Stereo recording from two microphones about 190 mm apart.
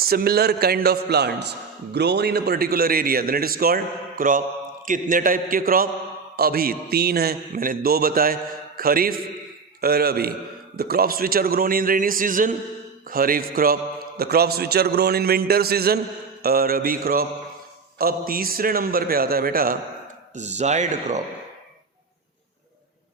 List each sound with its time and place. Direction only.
0.1 s a man's voice: 55° right (ahead or behind)
20.3 s speech: 40° right (ahead or behind)